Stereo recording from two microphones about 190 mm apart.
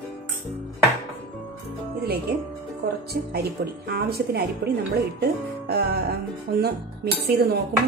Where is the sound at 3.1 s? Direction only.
55° right (ahead or behind).